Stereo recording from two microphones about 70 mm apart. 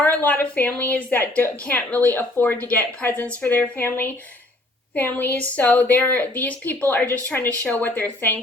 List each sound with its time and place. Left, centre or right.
0.0 s a woman's voice: left